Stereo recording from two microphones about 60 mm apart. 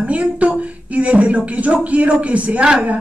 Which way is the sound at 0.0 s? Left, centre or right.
Right.